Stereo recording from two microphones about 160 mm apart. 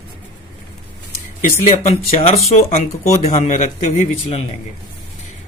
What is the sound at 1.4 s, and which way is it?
Speech, 45° left (ahead or behind).